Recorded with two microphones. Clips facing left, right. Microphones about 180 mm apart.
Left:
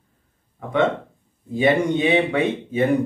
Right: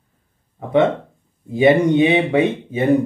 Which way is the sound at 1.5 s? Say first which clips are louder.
Right 5 dB; 20° right (ahead or behind).